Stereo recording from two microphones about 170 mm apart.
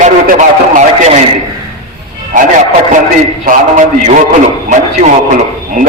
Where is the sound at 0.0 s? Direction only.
50° right (ahead or behind).